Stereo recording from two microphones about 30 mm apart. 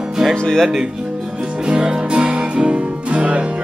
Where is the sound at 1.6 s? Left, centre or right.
Right.